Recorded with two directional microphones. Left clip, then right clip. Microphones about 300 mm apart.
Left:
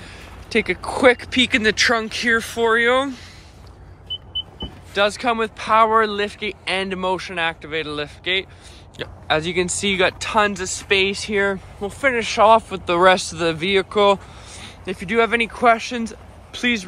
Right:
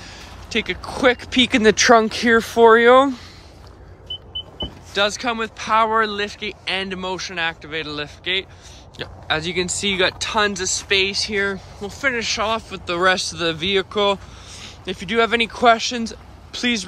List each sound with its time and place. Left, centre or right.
0.0 s a sound: centre
0.8 s speech: centre; by 3.2 s right
4.9 s speech: centre